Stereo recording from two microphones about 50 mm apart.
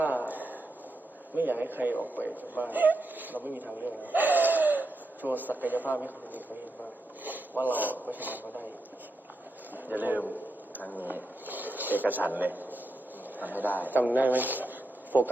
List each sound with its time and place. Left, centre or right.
0.0 s a sound: right
1.4 s speech: right
9.7 s speech: right
10.8 s speech: left
11.0 s speech: right